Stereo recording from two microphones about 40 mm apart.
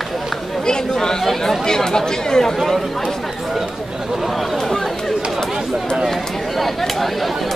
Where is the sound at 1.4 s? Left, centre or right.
Centre.